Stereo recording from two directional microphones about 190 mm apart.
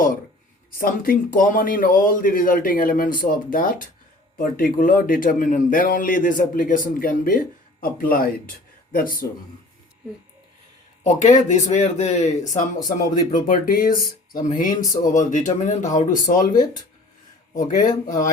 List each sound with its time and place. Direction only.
0.8 s a man's voice: 50° left (ahead or behind)
11.0 s a man's voice: 40° left (ahead or behind)